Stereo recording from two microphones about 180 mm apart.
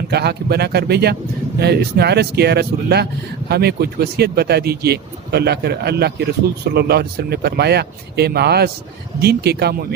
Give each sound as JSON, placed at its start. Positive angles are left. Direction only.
{"t": 0.1, "sound": "speech", "side_deg": -65}